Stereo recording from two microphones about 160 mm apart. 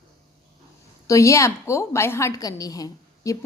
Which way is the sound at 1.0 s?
20° left (ahead or behind).